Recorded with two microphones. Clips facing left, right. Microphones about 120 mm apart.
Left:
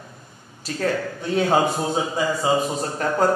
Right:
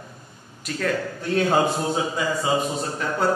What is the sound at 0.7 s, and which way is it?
Speech, 25° left (ahead or behind).